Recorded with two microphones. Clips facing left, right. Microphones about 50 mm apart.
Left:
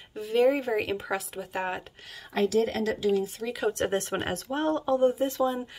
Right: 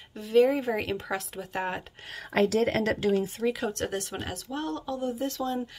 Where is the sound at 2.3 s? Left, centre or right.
Right.